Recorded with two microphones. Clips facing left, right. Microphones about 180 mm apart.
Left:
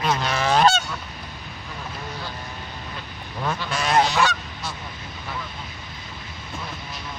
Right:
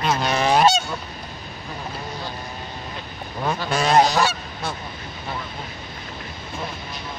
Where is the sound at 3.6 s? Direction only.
35° right (ahead or behind).